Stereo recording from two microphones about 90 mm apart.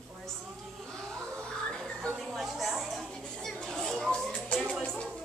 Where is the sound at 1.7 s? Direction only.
5° left (ahead or behind).